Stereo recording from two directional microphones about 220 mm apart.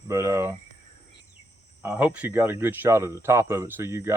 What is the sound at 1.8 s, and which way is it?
Speech, 10° right (ahead or behind).